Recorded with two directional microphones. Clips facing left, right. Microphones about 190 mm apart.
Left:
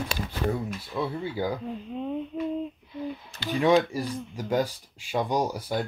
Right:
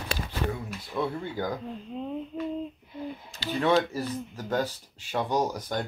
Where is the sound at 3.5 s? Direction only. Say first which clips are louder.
Left 3 dB; 15° left (ahead or behind).